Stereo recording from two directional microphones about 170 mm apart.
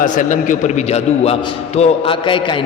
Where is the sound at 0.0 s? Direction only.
50° left (ahead or behind).